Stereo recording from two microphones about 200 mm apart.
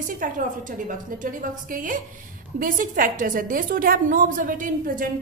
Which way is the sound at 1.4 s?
40° right (ahead or behind).